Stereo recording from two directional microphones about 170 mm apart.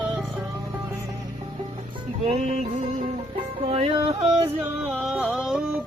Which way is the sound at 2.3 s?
40° right (ahead or behind).